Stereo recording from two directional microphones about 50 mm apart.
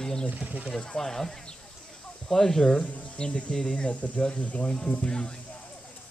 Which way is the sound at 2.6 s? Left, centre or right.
Left.